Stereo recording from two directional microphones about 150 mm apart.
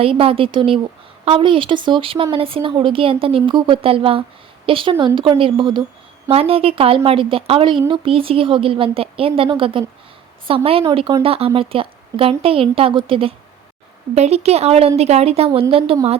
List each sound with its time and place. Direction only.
0.0 s a woman's voice: 40° right (ahead or behind)